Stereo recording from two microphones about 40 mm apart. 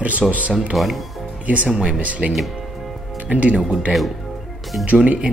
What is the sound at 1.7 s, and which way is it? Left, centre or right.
Speech, right.